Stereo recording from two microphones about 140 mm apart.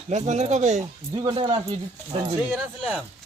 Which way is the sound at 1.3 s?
40° right (ahead or behind).